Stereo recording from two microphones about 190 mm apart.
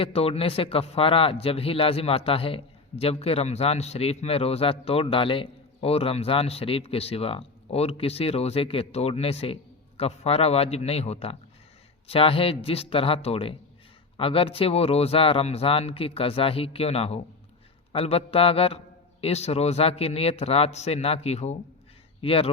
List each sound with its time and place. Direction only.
0.0 s a man's voice: 30° left (ahead or behind)